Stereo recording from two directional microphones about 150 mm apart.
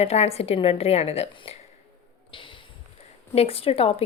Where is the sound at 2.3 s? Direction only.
35° left (ahead or behind).